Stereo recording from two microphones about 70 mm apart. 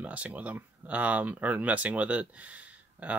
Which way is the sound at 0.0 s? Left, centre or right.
Right.